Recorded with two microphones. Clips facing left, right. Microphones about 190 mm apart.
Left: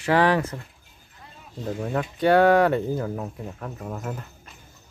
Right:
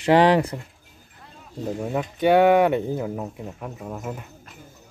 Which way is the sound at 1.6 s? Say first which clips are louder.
Right 1 dB; 10° right (ahead or behind).